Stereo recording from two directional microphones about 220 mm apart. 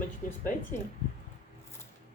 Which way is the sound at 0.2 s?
35° left (ahead or behind).